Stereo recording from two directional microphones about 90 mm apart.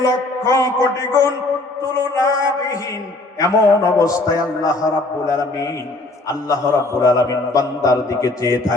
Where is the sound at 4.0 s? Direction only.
40° left (ahead or behind).